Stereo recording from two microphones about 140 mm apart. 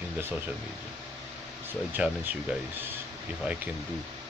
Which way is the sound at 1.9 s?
10° right (ahead or behind).